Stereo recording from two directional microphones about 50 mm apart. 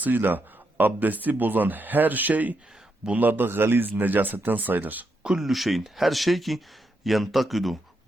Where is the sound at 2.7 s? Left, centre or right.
Centre.